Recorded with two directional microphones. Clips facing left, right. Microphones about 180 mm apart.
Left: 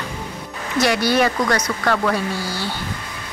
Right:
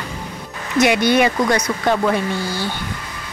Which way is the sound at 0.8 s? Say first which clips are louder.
Right 3 dB; 20° right (ahead or behind).